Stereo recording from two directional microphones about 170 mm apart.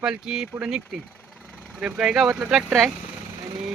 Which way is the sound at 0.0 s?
5° right (ahead or behind).